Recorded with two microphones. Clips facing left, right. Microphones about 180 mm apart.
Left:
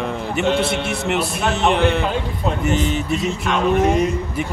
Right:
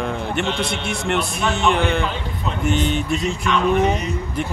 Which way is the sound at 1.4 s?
40° left (ahead or behind).